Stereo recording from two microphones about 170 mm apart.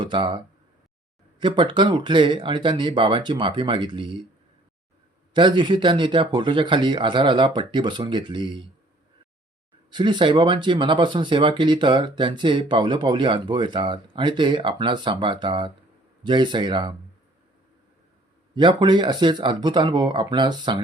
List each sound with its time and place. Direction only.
0.0 s speech: 30° right (ahead or behind)
5.3 s speech: 25° right (ahead or behind)
9.9 s speech: 25° right (ahead or behind)
18.5 s speech: 25° right (ahead or behind)